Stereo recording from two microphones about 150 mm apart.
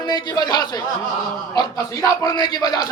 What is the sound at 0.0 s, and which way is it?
A man's voice, 30° left (ahead or behind).